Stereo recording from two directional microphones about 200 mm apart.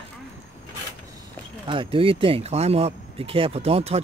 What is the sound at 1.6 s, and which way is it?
Speech, 25° right (ahead or behind).